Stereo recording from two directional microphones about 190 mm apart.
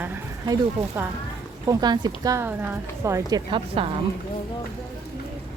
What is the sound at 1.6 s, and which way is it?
Speech, 20° right (ahead or behind).